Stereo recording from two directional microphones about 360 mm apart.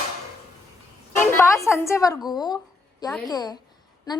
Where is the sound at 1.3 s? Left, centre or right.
Centre.